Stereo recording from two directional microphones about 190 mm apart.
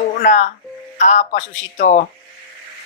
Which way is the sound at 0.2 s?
40° left (ahead or behind).